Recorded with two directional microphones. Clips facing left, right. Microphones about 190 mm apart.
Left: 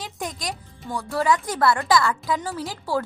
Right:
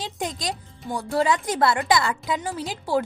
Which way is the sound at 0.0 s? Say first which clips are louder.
Right 2 dB; 25° right (ahead or behind).